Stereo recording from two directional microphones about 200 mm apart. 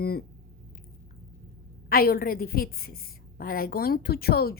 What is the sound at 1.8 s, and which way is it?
A woman's voice, 50° left (ahead or behind).